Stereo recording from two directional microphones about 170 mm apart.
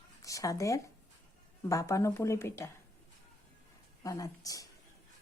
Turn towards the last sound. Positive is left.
turn(degrees=20)  # may be behind; listen again after turning